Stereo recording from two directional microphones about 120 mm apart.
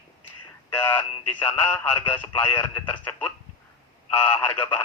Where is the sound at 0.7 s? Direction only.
15° left (ahead or behind).